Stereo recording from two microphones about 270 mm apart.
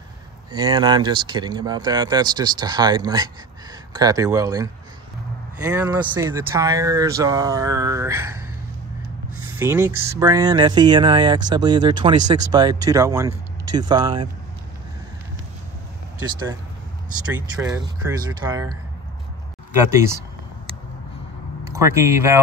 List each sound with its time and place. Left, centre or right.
0.5 s speech: centre
9.6 s speech: centre
17.3 s speech: centre
19.8 s speech: centre
21.6 s speech: centre